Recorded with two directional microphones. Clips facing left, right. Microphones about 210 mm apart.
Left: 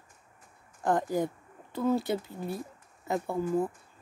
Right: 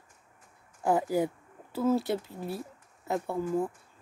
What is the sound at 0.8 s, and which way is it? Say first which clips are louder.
Speech: right 1 dB; 10° right (ahead or behind).